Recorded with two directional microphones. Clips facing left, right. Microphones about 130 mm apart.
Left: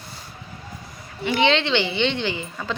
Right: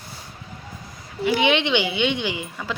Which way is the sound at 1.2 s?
10° right (ahead or behind).